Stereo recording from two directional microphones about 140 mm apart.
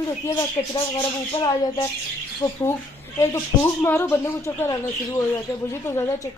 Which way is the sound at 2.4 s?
30° left (ahead or behind).